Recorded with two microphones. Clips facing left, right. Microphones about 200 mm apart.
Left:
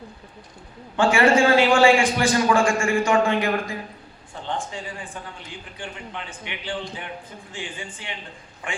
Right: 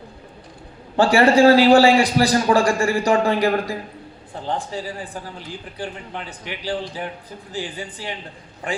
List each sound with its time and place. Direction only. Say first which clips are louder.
0.9 s speech: right 3 dB; 35° right (ahead or behind)